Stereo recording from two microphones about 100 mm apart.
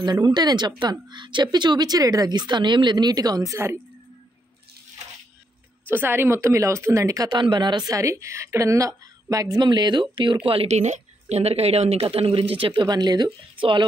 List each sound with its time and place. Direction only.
0.0 s a woman's voice: 45° right (ahead or behind)
5.9 s speech: 20° right (ahead or behind)
7.3 s a woman's voice: 50° right (ahead or behind); by 10.7 s 65° right (ahead or behind)
11.3 s speech: 90° right; by 12.7 s 70° right (ahead or behind)
12.7 s a woman's voice: 45° right (ahead or behind)